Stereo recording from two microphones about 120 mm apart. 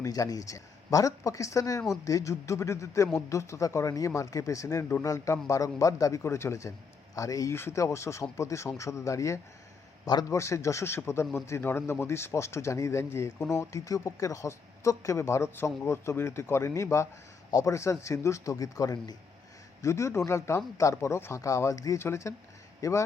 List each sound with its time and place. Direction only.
0.0 s speech: 30° left (ahead or behind)